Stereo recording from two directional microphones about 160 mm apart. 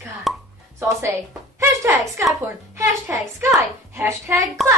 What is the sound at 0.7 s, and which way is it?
Speech, 20° right (ahead or behind).